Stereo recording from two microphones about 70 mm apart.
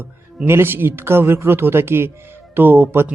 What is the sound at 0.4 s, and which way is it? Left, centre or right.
A man's voice, right.